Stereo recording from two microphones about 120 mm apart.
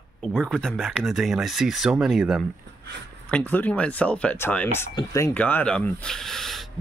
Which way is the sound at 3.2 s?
10° left (ahead or behind).